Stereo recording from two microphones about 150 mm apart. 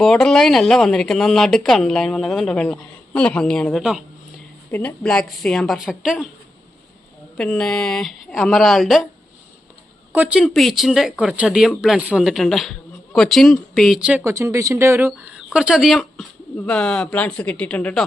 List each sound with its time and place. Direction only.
0.0 s speech: 5° left (ahead or behind)
4.7 s speech: 10° left (ahead or behind)
7.3 s speech: 5° left (ahead or behind)
10.1 s speech: 10° right (ahead or behind)
14.3 s speech: 20° right (ahead or behind)
15.4 s speech: 5° right (ahead or behind)